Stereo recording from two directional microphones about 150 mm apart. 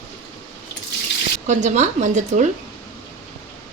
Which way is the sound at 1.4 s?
55° right (ahead or behind).